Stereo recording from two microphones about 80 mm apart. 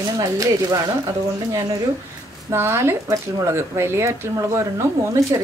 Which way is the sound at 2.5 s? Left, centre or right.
Right.